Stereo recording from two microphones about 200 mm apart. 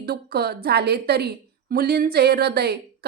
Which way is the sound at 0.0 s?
50° right (ahead or behind).